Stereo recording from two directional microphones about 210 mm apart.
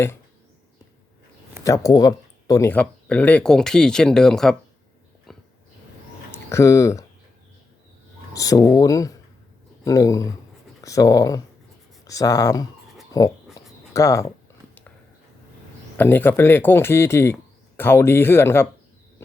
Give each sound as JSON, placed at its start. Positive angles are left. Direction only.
{"t": 1.6, "sound": "speech", "side_deg": 15}
{"t": 6.3, "sound": "speech", "side_deg": 15}
{"t": 8.3, "sound": "speech", "side_deg": 15}
{"t": 13.1, "sound": "a sound", "side_deg": 15}
{"t": 13.9, "sound": "speech", "side_deg": 15}
{"t": 16.0, "sound": "speech", "side_deg": 10}